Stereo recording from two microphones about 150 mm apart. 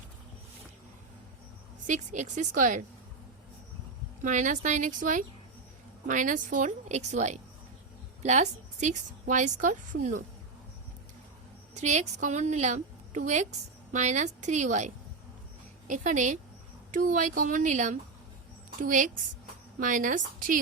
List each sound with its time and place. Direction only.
1.9 s a woman's voice: 55° right (ahead or behind)
4.2 s a woman's voice: 55° right (ahead or behind)
11.7 s a woman's voice: 50° right (ahead or behind)